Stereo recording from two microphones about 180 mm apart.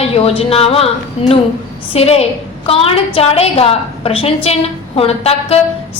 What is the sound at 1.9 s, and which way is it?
A woman's voice, 35° left (ahead or behind).